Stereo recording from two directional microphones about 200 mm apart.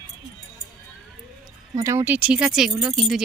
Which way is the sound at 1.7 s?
15° right (ahead or behind).